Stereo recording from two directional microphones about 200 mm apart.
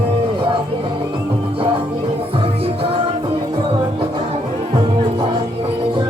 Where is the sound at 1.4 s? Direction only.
25° right (ahead or behind).